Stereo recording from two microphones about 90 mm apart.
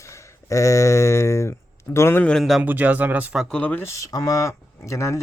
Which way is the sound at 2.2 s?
10° left (ahead or behind).